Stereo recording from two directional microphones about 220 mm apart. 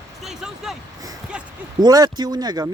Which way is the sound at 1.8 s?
20° right (ahead or behind).